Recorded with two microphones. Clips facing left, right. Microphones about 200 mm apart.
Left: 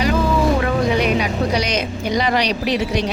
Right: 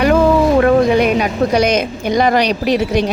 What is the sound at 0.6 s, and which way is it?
A woman's voice, 50° right (ahead or behind).